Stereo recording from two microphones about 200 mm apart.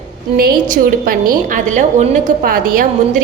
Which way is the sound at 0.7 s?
45° right (ahead or behind).